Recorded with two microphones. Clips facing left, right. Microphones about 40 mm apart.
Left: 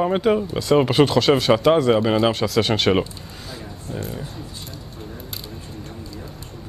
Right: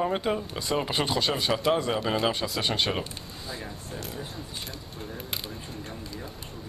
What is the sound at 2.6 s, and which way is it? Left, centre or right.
Speech, left.